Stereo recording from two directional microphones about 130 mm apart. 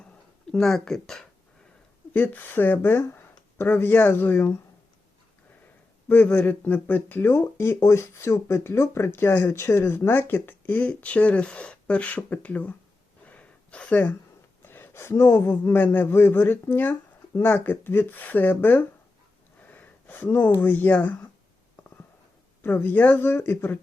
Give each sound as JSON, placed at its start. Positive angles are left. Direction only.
{"t": 0.5, "sound": "speech", "side_deg": 5}
{"t": 2.1, "sound": "speech", "side_deg": 15}
{"t": 6.1, "sound": "speech", "side_deg": 15}
{"t": 13.2, "sound": "a sound", "side_deg": 10}
{"t": 14.6, "sound": "speech", "side_deg": 15}
{"t": 19.6, "sound": "a sound", "side_deg": 15}
{"t": 20.6, "sound": "speech", "side_deg": 15}
{"t": 22.6, "sound": "speech", "side_deg": 15}